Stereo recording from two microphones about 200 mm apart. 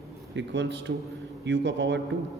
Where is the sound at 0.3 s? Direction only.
60° right (ahead or behind).